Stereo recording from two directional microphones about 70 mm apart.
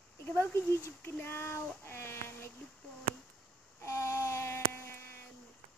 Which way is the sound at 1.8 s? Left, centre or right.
Left.